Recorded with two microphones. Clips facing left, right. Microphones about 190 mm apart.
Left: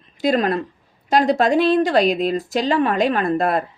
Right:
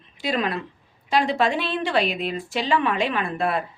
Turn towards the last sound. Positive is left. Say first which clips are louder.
# left 5 dB
turn(degrees=40)  # may be behind; listen again after turning